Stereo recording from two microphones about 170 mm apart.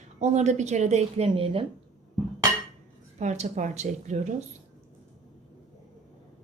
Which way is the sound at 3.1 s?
40° right (ahead or behind).